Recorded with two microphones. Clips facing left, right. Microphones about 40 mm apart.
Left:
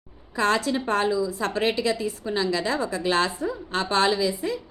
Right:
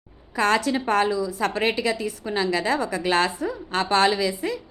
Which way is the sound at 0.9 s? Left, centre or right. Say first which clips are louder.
Right 1 dB; right.